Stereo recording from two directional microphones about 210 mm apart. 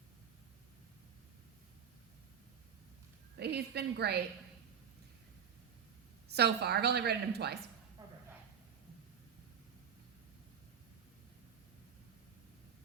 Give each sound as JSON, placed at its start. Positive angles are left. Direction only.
{"t": 3.3, "sound": "a woman's voice", "side_deg": -50}
{"t": 6.2, "sound": "a woman's voice", "side_deg": -50}
{"t": 8.0, "sound": "a sound", "side_deg": -20}